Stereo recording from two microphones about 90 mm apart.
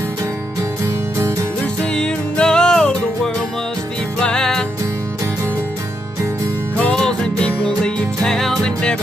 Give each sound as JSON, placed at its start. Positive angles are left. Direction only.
{"t": 0.8, "sound": "music", "side_deg": -35}
{"t": 1.8, "sound": "music", "side_deg": 10}
{"t": 4.2, "sound": "music", "side_deg": 10}
{"t": 6.8, "sound": "music", "side_deg": 10}